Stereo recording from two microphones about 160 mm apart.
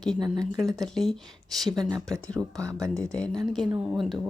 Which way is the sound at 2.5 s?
20° right (ahead or behind).